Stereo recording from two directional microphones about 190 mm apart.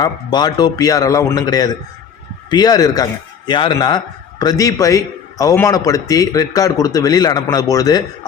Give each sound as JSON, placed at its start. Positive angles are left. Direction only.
{"t": 0.0, "sound": "a man's voice", "side_deg": 20}